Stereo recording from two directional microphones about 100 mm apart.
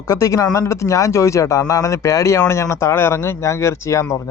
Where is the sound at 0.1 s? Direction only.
35° left (ahead or behind).